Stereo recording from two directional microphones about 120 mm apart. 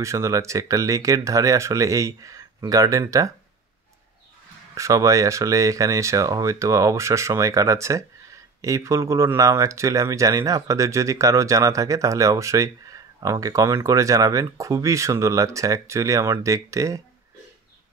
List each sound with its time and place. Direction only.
0.0 s speech: 25° right (ahead or behind)
4.7 s speech: 25° right (ahead or behind)